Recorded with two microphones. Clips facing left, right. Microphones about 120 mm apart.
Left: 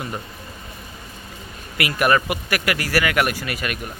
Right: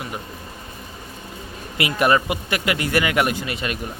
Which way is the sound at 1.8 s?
25° right (ahead or behind).